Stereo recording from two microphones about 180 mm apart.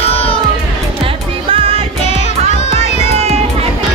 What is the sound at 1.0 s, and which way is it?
Music, 30° right (ahead or behind).